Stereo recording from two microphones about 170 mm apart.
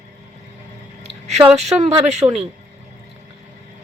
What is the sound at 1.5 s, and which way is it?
Speech, 40° right (ahead or behind).